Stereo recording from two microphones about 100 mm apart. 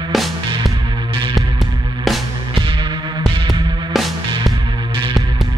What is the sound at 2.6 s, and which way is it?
Music, 55° right (ahead or behind).